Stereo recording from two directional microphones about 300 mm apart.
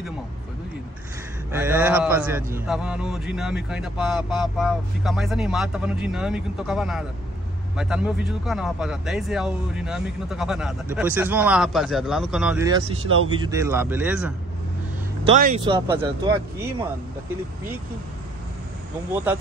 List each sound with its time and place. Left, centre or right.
1.5 s speech: centre
15.2 s speech: right